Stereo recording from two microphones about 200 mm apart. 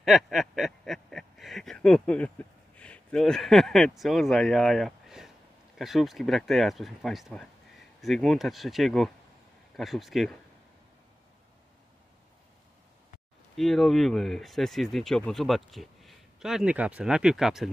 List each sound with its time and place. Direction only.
0.0 s a sound: centre (ahead or behind)
5.8 s speech: centre (ahead or behind)
13.6 s speech: centre (ahead or behind)